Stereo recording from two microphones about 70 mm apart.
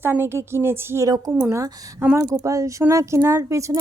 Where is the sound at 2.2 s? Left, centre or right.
Right.